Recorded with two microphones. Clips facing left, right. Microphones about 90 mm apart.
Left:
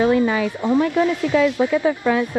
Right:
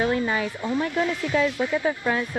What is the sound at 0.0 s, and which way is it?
Speech, 20° left (ahead or behind).